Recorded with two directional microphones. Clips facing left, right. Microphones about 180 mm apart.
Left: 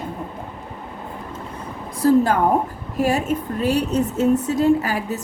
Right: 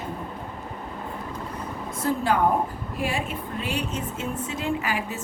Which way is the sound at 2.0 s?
40° left (ahead or behind).